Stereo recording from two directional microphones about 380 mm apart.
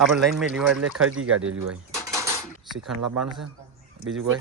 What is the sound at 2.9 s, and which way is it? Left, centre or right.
Speech, right.